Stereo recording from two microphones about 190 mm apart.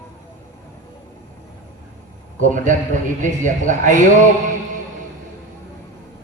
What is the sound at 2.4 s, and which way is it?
Speech, 40° right (ahead or behind).